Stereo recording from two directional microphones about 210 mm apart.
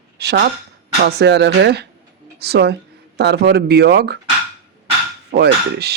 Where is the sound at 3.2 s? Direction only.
50° right (ahead or behind).